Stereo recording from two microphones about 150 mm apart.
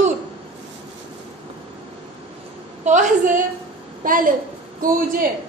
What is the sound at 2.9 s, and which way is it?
A woman's voice, 60° right (ahead or behind).